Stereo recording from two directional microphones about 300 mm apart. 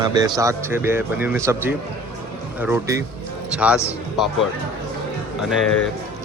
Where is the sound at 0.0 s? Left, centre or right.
Centre.